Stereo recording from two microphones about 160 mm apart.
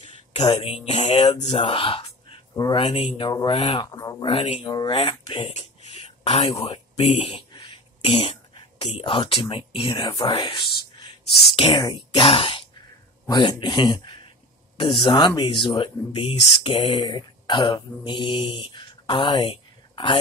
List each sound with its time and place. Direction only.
0.0 s a sound: 30° left (ahead or behind)
0.8 s music: 45° left (ahead or behind)
1.5 s speech: 35° left (ahead or behind)
4.3 s speech: 35° left (ahead or behind)